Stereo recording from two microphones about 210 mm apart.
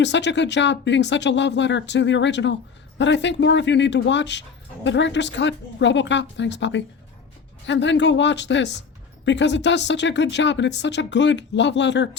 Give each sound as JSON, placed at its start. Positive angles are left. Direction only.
{"t": 0.0, "sound": "speech", "side_deg": 55}